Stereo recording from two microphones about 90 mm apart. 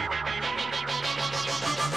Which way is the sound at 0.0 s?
Centre (ahead or behind).